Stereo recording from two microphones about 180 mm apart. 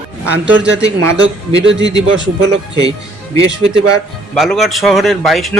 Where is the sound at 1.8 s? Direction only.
20° left (ahead or behind).